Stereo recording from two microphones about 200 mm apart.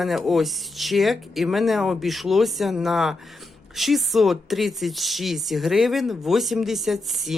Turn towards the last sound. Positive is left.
turn(degrees=0)  # may be behind; listen again after turning